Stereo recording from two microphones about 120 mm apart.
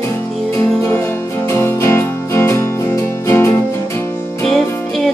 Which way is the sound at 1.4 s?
20° left (ahead or behind).